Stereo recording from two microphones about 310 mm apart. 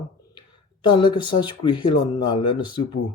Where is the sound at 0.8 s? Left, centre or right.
Centre.